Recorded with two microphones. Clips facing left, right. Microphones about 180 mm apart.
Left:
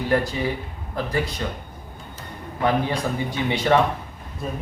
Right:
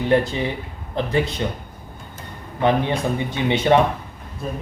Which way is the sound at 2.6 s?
25° right (ahead or behind).